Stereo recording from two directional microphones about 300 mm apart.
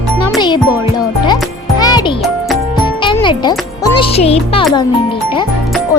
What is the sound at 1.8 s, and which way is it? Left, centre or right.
Music, centre.